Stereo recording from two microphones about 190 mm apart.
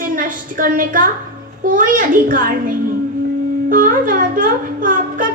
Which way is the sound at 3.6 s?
45° right (ahead or behind).